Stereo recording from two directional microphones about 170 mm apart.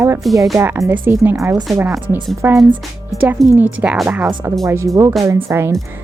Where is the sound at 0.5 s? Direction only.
15° right (ahead or behind).